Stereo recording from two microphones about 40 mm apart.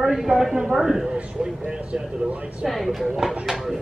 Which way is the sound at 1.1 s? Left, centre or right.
Right.